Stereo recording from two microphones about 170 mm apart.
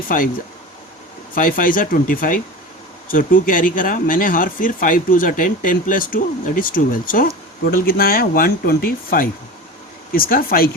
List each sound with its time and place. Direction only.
0.1 s speech: 55° left (ahead or behind)
1.4 s speech: 55° left (ahead or behind)